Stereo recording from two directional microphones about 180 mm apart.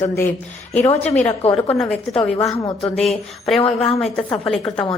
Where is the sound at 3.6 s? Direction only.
30° left (ahead or behind).